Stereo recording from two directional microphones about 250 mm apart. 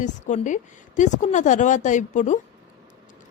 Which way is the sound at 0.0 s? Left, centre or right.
Left.